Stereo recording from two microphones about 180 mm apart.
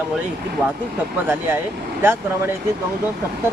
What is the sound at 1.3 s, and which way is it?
Speech, 10° right (ahead or behind).